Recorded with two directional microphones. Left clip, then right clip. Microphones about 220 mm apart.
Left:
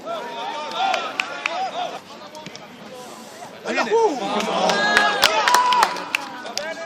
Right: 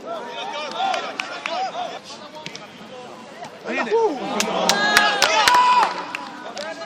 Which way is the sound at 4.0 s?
25° left (ahead or behind).